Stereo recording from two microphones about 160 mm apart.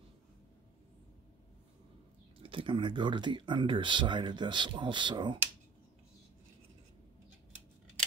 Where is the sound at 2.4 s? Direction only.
35° right (ahead or behind).